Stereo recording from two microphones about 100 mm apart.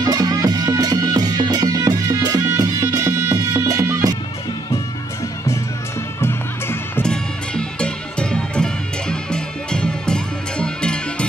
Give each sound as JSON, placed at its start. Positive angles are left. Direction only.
{"t": 0.0, "sound": "music", "side_deg": -35}
{"t": 7.0, "sound": "music", "side_deg": 10}